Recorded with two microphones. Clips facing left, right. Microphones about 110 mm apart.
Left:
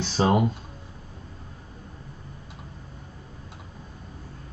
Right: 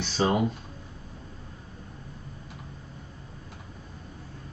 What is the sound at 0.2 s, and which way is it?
Speech, 25° left (ahead or behind).